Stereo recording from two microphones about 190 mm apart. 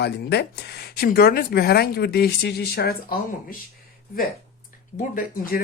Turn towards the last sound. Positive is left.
turn(degrees=45)  # may be behind; listen again after turning